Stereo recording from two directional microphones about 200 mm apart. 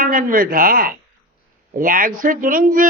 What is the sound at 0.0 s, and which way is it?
Speech, 45° right (ahead or behind).